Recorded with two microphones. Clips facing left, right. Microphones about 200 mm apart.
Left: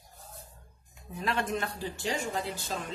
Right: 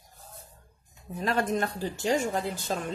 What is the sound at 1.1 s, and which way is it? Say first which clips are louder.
Speech: right 4 dB; 40° right (ahead or behind).